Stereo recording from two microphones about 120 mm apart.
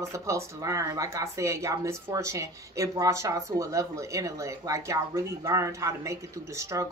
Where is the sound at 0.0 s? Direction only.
25° right (ahead or behind).